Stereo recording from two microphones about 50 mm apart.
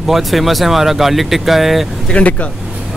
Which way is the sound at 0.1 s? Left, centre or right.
Centre.